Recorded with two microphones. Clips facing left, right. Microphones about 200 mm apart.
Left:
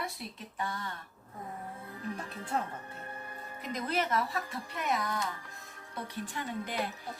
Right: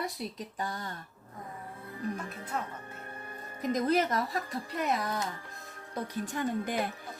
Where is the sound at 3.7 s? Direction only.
40° right (ahead or behind).